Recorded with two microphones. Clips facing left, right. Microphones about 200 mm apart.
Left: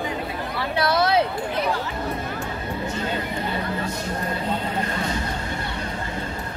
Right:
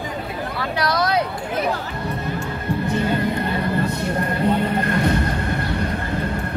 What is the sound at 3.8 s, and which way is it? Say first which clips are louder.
Neigh: right 5 dB; 60° right (ahead or behind).